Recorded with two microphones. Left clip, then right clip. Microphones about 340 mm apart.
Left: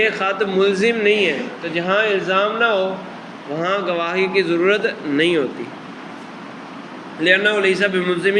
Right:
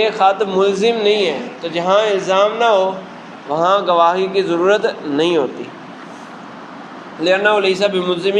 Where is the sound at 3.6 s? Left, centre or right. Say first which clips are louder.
Right 8 dB; centre.